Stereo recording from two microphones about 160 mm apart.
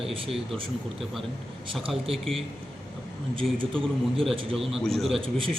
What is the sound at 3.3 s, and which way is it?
Speech, 35° right (ahead or behind).